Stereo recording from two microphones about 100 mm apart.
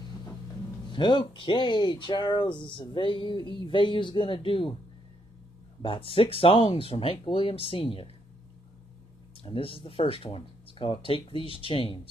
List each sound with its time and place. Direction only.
0.8 s speech: 50° left (ahead or behind)
5.8 s speech: 65° left (ahead or behind)
9.4 s speech: 65° left (ahead or behind)